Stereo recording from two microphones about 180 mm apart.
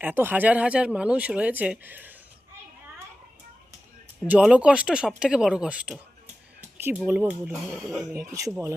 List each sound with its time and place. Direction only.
0.0 s speech: 10° right (ahead or behind)
4.3 s speech: 5° right (ahead or behind)